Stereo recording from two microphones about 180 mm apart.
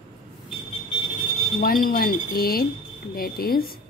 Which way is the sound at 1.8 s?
55° left (ahead or behind).